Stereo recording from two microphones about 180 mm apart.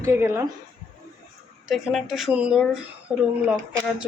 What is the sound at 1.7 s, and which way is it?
Speech, centre (ahead or behind).